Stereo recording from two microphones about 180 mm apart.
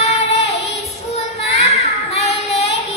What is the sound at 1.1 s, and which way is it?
Child singing, 35° left (ahead or behind).